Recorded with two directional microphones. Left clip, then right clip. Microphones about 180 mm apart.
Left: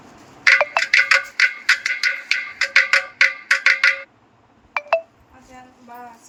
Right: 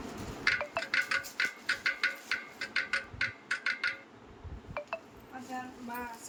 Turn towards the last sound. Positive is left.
turn(degrees=55)  # may be behind; listen again after turning